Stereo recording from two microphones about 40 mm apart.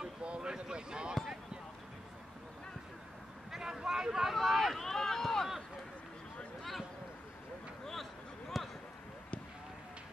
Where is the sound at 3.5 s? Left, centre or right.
Centre.